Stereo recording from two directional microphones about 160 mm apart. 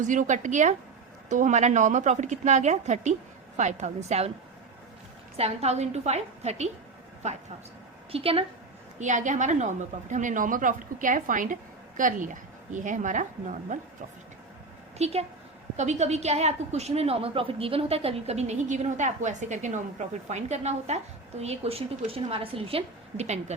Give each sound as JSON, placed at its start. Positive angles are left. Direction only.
{"t": 0.0, "sound": "a woman's voice", "side_deg": -50}
{"t": 5.4, "sound": "a woman's voice", "side_deg": -40}
{"t": 9.0, "sound": "a woman's voice", "side_deg": -50}
{"t": 14.9, "sound": "a woman's voice", "side_deg": -40}